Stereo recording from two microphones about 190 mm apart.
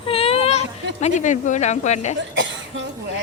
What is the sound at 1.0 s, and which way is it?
Speech, 40° left (ahead or behind).